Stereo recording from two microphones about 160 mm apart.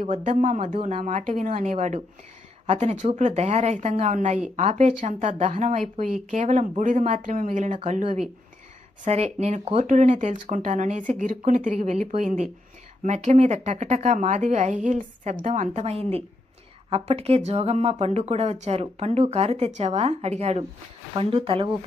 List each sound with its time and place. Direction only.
0.1 s speech: 50° right (ahead or behind)
0.7 s speech: 45° right (ahead or behind)